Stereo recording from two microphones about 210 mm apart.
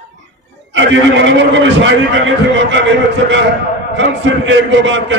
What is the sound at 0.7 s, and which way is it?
A man's voice, 60° right (ahead or behind).